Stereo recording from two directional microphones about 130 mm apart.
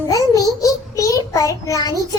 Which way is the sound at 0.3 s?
25° left (ahead or behind).